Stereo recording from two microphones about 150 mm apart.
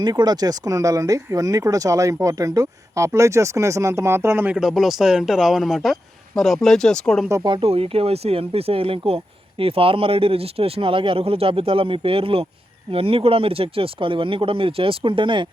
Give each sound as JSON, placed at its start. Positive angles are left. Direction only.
{"t": 0.0, "sound": "speech", "side_deg": -25}
{"t": 4.5, "sound": "speech", "side_deg": 0}
{"t": 7.4, "sound": "speech", "side_deg": -35}